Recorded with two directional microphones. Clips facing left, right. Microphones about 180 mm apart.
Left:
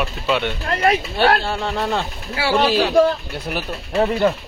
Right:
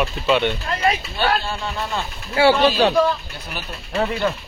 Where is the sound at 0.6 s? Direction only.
60° left (ahead or behind).